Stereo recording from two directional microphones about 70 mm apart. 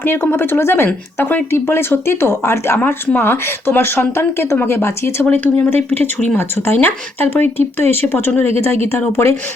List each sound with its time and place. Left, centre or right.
0.0 s speech: left
1.5 s speech: left
2.7 s speech: left
5.2 s speech: left